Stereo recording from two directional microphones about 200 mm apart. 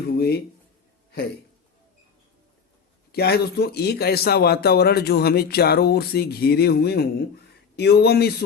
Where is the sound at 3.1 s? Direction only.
55° left (ahead or behind).